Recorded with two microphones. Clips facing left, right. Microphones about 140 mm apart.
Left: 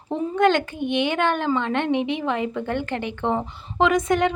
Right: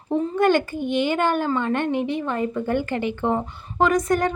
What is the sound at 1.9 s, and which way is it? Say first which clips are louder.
Speech: left 1 dB; 70° left (ahead or behind).